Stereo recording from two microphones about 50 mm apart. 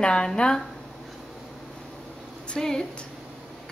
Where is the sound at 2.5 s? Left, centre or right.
Centre.